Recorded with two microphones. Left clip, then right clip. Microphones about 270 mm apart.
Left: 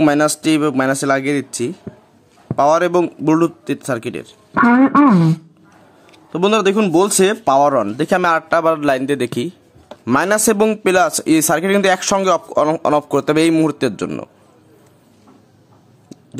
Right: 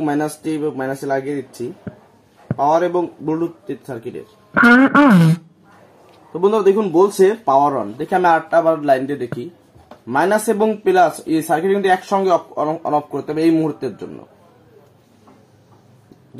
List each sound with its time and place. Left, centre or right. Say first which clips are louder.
0.0 s speech: left 7 dB; left
1.9 s a sound: even; right
2.5 s speech: left 3 dB; left
4.6 s a man's voice: right 1 dB; right
6.3 s speech: even; left